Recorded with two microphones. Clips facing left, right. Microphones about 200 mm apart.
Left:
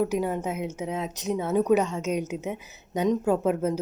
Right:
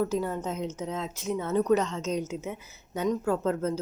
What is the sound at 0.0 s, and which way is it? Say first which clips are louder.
Speech: left 3 dB; 15° left (ahead or behind).